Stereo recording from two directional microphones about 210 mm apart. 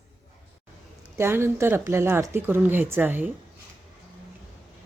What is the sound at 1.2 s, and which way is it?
Speech, 10° right (ahead or behind).